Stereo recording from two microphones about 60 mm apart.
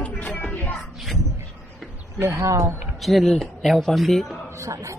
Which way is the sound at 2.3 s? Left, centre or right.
Right.